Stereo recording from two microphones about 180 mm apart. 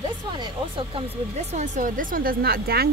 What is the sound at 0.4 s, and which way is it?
Speech, 30° right (ahead or behind).